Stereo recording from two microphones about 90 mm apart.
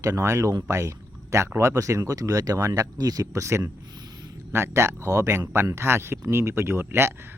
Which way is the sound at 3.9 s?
50° right (ahead or behind).